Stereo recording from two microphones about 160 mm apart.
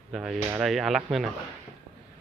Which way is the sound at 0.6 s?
Centre (ahead or behind).